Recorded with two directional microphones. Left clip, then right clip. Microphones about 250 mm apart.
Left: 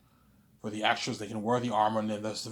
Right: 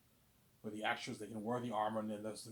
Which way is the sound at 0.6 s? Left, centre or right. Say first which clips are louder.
Left 11 dB; left.